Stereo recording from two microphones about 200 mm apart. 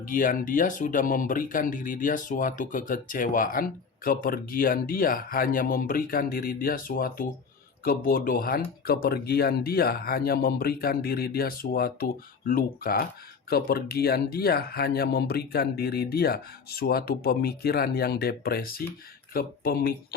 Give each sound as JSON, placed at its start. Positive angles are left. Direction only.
{"t": 0.0, "sound": "speech", "side_deg": 45}